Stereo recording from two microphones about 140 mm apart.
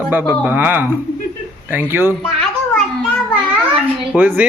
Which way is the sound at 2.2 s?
5° left (ahead or behind).